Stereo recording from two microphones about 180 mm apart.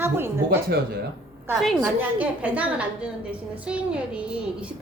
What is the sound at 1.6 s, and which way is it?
A woman's voice, centre (ahead or behind).